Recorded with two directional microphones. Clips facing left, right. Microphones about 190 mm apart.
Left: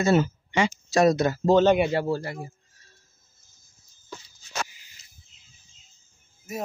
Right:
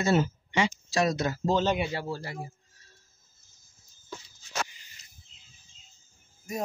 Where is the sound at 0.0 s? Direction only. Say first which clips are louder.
Left 4 dB; 50° left (ahead or behind).